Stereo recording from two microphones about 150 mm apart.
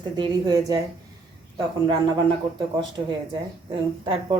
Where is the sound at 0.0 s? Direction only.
30° right (ahead or behind).